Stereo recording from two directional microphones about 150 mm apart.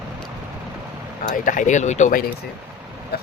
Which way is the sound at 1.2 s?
60° left (ahead or behind).